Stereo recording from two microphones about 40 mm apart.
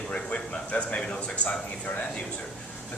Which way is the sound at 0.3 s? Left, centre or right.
Left.